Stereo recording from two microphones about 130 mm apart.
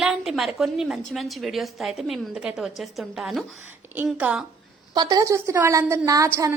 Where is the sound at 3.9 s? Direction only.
10° right (ahead or behind).